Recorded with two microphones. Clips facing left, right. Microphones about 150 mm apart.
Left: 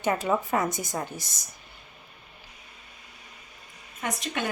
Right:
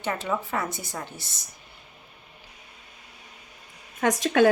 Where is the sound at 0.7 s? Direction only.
45° left (ahead or behind).